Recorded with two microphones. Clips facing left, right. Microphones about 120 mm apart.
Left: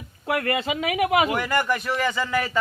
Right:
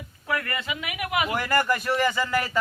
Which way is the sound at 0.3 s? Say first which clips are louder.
Left 5 dB; 70° left (ahead or behind).